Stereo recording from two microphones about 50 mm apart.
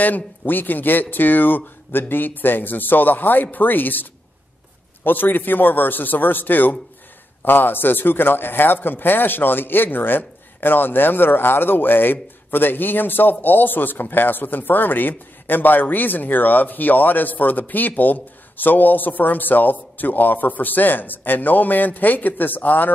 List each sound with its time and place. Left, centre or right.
0.0 s speech: left